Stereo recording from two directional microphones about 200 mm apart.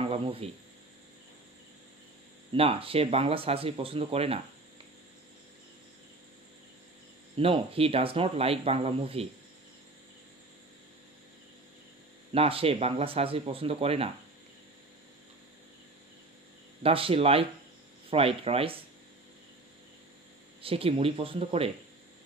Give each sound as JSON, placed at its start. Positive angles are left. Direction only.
{"t": 0.0, "sound": "a sound", "side_deg": -30}
{"t": 2.5, "sound": "speech", "side_deg": -30}
{"t": 7.3, "sound": "speech", "side_deg": -30}
{"t": 12.3, "sound": "speech", "side_deg": -30}
{"t": 16.8, "sound": "speech", "side_deg": -30}
{"t": 20.6, "sound": "speech", "side_deg": -30}